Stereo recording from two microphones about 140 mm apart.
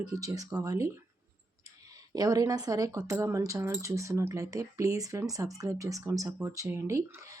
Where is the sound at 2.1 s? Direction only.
30° right (ahead or behind).